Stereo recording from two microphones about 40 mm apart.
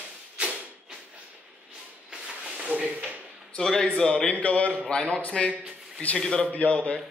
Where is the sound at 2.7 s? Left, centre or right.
Right.